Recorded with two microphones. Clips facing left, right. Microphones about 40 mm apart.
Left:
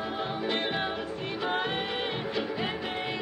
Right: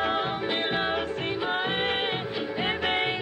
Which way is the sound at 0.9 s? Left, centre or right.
Right.